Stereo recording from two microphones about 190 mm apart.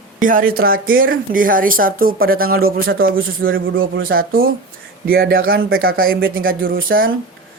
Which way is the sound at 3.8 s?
50° right (ahead or behind).